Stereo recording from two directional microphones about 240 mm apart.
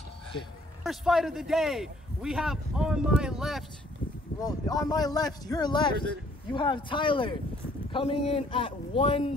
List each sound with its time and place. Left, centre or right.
0.8 s a man's voice: centre
4.4 s speech: centre